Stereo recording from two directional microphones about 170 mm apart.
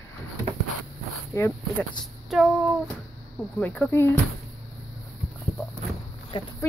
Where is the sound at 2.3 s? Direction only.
5° right (ahead or behind).